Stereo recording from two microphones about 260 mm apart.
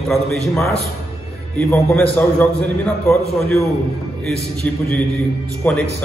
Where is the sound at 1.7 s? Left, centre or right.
Centre.